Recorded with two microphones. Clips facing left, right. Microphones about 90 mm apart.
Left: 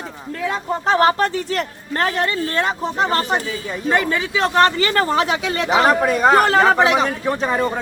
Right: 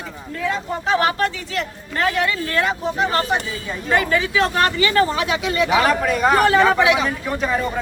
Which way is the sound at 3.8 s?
25° left (ahead or behind).